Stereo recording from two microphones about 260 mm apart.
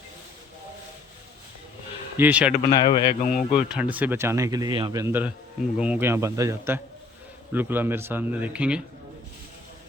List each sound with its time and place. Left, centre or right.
2.1 s a man's voice: centre
2.6 s a man's voice: centre
3.3 s speech: centre